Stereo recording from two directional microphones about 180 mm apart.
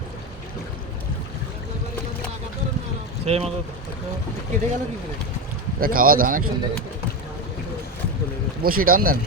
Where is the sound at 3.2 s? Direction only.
35° right (ahead or behind).